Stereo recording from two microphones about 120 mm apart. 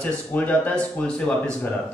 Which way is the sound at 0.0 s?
10° left (ahead or behind).